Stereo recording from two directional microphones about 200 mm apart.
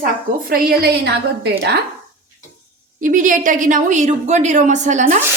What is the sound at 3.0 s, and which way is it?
A woman's voice, 40° right (ahead or behind).